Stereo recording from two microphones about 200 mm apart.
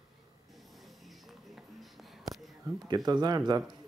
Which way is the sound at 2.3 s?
20° right (ahead or behind).